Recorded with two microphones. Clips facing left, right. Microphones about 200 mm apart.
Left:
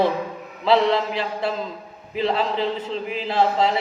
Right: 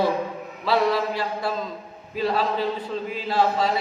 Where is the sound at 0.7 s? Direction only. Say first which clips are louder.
Left 3 dB; 25° left (ahead or behind).